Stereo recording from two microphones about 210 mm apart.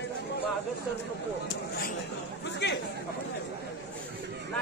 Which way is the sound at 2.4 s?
55° left (ahead or behind).